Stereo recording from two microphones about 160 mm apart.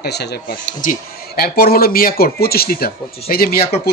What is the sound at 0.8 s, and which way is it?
Speech, 70° left (ahead or behind).